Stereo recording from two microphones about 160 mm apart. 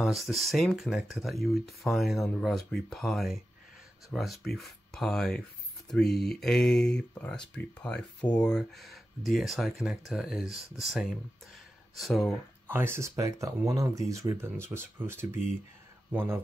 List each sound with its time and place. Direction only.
0.0 s speech: centre (ahead or behind)
12.6 s speech: 15° right (ahead or behind)
16.1 s speech: 15° right (ahead or behind)